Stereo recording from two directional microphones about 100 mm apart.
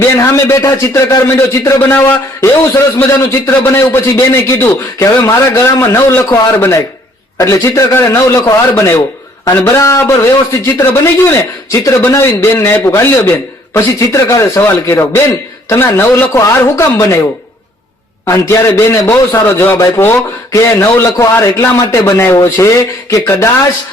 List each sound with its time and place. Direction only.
0.0 s a man's voice: 25° left (ahead or behind)
18.3 s a man's voice: 25° left (ahead or behind)